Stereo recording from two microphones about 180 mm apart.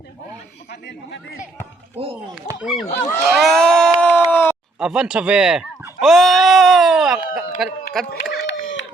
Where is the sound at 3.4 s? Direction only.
Centre (ahead or behind).